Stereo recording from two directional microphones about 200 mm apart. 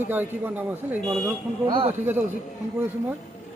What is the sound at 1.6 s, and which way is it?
Speech, 25° right (ahead or behind).